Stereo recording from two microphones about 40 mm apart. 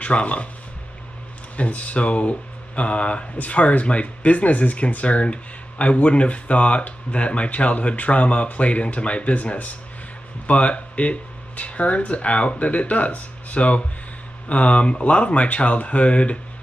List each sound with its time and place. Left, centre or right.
0.0 s speech: left
1.6 s speech: left